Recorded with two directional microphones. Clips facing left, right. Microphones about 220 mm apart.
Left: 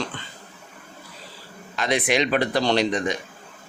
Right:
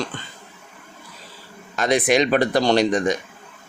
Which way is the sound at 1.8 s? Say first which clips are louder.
Right 4 dB; 45° right (ahead or behind).